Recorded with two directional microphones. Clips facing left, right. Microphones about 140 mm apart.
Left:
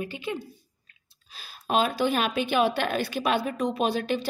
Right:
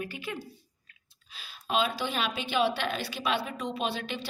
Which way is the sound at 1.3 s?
45° left (ahead or behind).